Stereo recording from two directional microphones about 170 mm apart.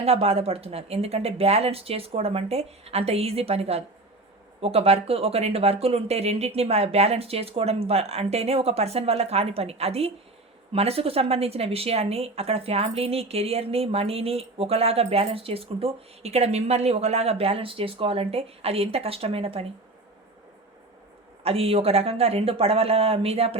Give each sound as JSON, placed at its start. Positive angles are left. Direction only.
{"t": 0.0, "sound": "speech", "side_deg": -35}
{"t": 21.4, "sound": "speech", "side_deg": -35}